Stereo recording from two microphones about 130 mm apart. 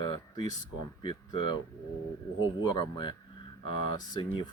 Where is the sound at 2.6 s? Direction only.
35° left (ahead or behind).